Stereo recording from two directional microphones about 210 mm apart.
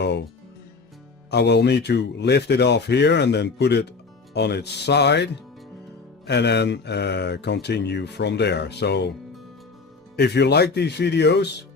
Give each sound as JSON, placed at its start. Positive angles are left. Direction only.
{"t": 0.0, "sound": "music", "side_deg": 55}
{"t": 1.3, "sound": "speech", "side_deg": 55}
{"t": 10.2, "sound": "speech", "side_deg": 50}